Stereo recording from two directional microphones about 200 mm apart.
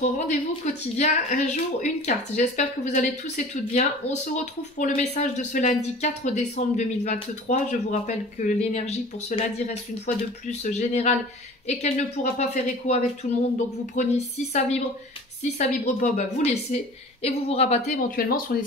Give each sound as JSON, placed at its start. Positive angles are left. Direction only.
{"t": 0.0, "sound": "speech", "side_deg": 35}
{"t": 18.1, "sound": "speech", "side_deg": 45}